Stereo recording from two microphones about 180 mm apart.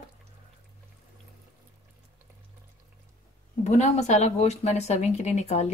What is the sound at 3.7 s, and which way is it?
Speech, 40° left (ahead or behind).